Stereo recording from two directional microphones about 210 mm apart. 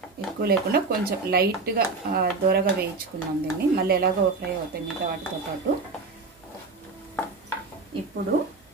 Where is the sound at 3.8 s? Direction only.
45° right (ahead or behind).